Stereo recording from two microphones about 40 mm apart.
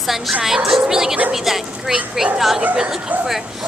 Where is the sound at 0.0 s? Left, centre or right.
Centre.